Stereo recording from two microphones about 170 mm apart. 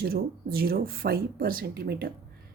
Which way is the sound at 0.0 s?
60° right (ahead or behind).